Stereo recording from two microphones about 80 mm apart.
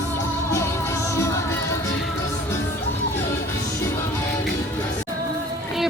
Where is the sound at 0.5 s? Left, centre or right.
Left.